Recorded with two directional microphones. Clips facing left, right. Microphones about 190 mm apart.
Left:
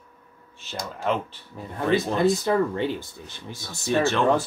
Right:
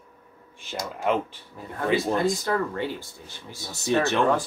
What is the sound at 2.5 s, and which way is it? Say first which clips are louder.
Speech: left 4 dB; 20° left (ahead or behind).